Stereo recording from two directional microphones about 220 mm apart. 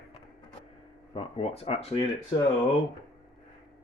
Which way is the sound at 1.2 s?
25° left (ahead or behind).